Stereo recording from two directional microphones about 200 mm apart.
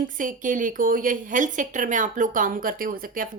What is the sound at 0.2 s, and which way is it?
A woman's voice, 40° right (ahead or behind).